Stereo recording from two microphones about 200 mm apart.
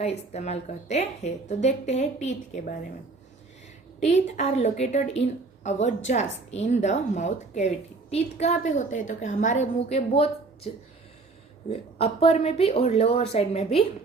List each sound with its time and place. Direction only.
0.0 s a woman's voice: 35° left (ahead or behind)
4.0 s a woman's voice: 35° left (ahead or behind)
6.5 s a woman's voice: 35° left (ahead or behind)
11.7 s a woman's voice: 30° left (ahead or behind)